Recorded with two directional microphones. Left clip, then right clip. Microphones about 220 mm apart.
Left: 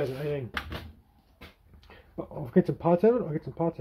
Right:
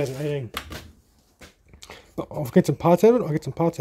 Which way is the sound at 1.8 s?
45° right (ahead or behind).